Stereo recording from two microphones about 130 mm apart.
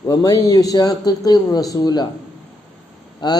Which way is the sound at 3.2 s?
35° left (ahead or behind).